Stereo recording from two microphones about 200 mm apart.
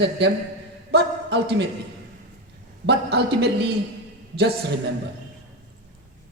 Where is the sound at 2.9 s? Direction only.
55° right (ahead or behind).